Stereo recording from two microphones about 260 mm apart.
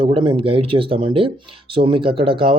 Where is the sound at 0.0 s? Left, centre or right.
Centre.